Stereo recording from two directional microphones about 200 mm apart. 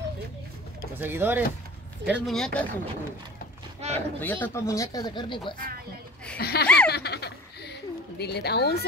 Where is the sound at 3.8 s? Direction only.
35° right (ahead or behind).